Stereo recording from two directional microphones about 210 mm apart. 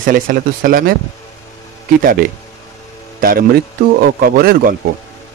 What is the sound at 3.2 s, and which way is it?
Speech, 45° right (ahead or behind).